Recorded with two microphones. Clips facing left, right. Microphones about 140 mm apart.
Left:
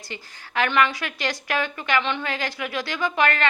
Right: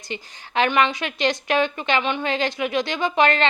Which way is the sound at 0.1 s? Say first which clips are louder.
Right 4 dB; 20° right (ahead or behind).